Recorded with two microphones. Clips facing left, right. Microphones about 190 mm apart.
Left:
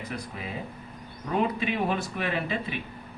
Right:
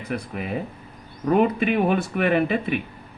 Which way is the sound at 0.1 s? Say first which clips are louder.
Right 12 dB; 60° right (ahead or behind).